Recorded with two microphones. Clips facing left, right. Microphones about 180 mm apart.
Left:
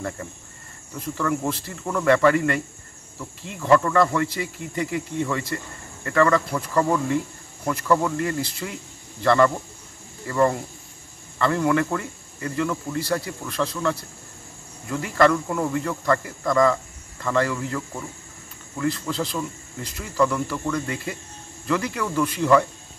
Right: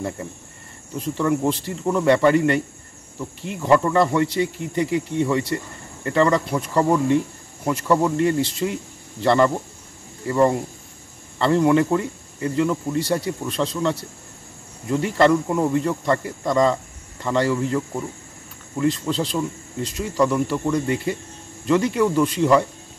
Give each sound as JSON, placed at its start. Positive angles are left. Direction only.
{"t": 0.9, "sound": "speech", "side_deg": -20}